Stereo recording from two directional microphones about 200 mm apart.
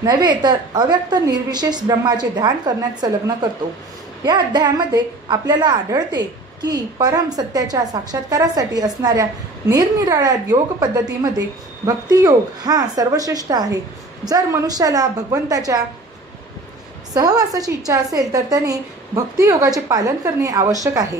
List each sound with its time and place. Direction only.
0.0 s a woman's voice: 20° right (ahead or behind)
4.2 s a woman's voice: 20° right (ahead or behind)
17.1 s a woman's voice: 20° right (ahead or behind)